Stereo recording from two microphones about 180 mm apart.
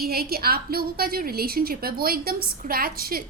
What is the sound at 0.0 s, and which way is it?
A woman's voice, 60° right (ahead or behind).